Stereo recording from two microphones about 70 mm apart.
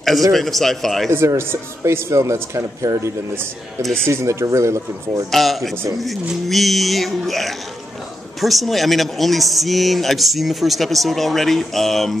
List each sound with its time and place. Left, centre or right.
0.3 s speech: centre
1.1 s speech: right
3.8 s speech: centre
4.1 s speech: right
5.3 s speech: centre